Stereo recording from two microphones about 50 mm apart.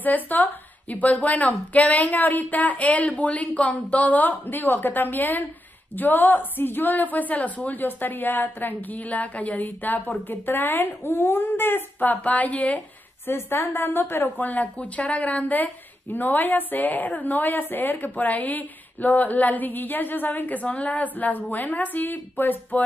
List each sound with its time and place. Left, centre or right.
0.0 s speech: left
12.0 s speech: left
13.3 s a woman's voice: left
14.5 s speech: left